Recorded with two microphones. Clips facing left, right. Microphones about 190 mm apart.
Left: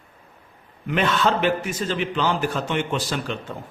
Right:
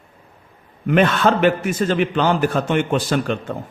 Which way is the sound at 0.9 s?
55° right (ahead or behind).